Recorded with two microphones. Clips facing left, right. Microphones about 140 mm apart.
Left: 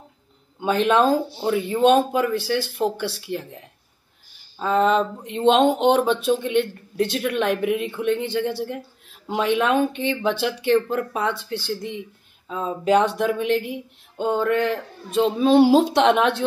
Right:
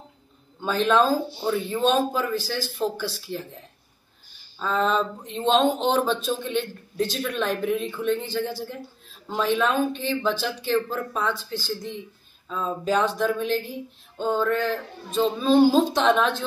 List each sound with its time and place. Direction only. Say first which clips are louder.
0.6 s a man's voice: left 2 dB; 65° left (ahead or behind)
1.4 s speech: left 3 dB; 10° left (ahead or behind)
1.8 s speech: left 6 dB; 60° left (ahead or behind)
5.2 s a woman's voice: left 4 dB; 65° left (ahead or behind)
12.4 s speech: left 2 dB; 15° left (ahead or behind)
12.8 s a woman's voice: left 4 dB; 65° left (ahead or behind)